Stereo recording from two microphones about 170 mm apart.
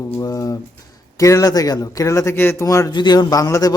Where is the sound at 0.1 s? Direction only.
20° left (ahead or behind).